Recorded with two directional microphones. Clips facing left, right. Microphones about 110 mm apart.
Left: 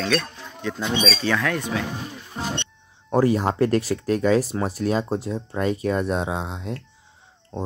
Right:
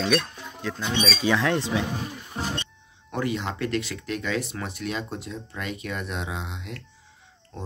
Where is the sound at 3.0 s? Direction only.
35° left (ahead or behind).